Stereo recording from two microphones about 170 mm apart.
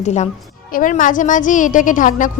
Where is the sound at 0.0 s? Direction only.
40° left (ahead or behind).